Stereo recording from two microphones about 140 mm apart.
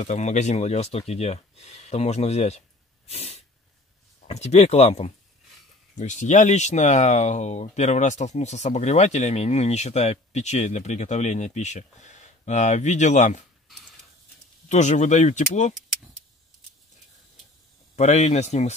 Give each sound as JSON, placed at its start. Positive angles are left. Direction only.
{"t": 0.0, "sound": "speech", "side_deg": 60}
{"t": 3.1, "sound": "sneeze", "side_deg": 50}
{"t": 4.3, "sound": "speech", "side_deg": 50}
{"t": 14.7, "sound": "speech", "side_deg": 60}
{"t": 17.9, "sound": "speech", "side_deg": 55}